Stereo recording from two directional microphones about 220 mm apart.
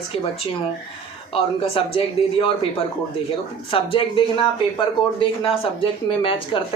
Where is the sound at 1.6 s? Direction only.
25° left (ahead or behind).